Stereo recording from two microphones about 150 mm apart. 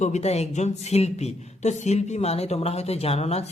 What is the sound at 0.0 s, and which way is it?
Speech, 50° left (ahead or behind).